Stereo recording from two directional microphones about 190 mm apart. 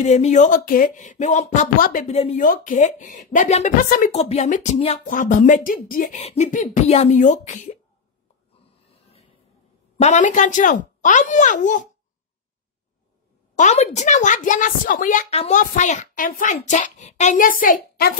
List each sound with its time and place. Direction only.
0.0 s a woman's voice: 35° left (ahead or behind)
4.1 s a woman's voice: 35° left (ahead or behind)
6.2 s a woman's voice: 35° left (ahead or behind)
9.9 s a woman's voice: 35° left (ahead or behind)
13.6 s a woman's voice: 35° left (ahead or behind)